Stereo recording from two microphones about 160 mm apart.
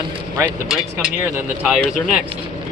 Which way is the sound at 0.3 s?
5° right (ahead or behind).